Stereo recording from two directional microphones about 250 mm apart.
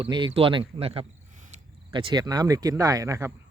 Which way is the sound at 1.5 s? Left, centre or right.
Right.